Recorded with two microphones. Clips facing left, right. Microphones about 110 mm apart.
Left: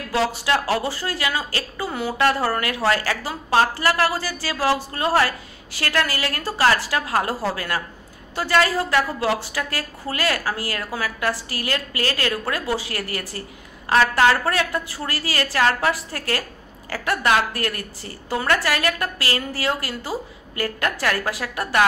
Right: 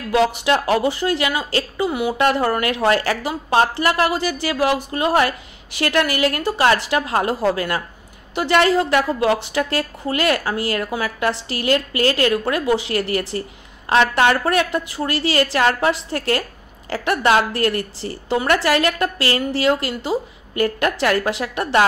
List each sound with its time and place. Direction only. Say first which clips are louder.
0.1 s a woman's voice: right 4 dB; 20° right (ahead or behind)